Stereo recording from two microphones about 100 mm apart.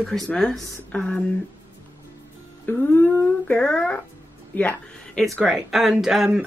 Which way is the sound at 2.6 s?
20° left (ahead or behind).